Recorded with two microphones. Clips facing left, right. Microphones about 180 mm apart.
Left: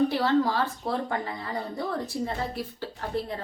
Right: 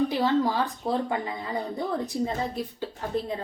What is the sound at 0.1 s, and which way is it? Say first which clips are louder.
Speech: even; 15° right (ahead or behind).